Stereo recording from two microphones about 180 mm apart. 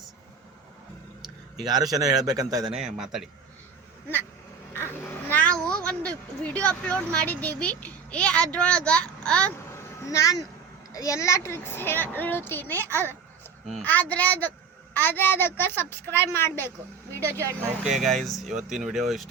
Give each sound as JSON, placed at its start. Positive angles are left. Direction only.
{"t": 1.6, "sound": "a man's voice", "side_deg": -20}
{"t": 2.7, "sound": "speech", "side_deg": -5}
{"t": 4.7, "sound": "speech", "side_deg": 10}
{"t": 17.2, "sound": "speech", "side_deg": -15}
{"t": 17.8, "sound": "speech", "side_deg": 0}